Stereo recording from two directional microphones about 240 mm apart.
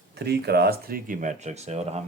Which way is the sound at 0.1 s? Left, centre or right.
Right.